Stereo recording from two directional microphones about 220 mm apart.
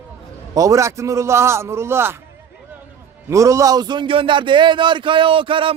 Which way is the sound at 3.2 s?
15° right (ahead or behind).